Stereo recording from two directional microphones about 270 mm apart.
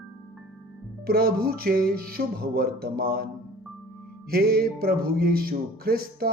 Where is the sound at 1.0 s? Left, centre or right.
Right.